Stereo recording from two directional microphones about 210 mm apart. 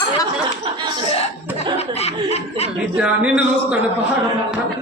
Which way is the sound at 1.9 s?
30° left (ahead or behind).